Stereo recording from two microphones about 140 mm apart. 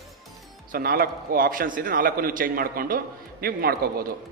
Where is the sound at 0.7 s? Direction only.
90° right.